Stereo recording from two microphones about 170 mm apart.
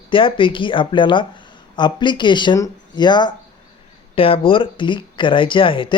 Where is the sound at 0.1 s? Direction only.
30° left (ahead or behind).